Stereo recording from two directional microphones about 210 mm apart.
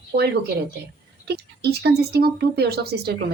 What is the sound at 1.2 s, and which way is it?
Speech, 50° right (ahead or behind).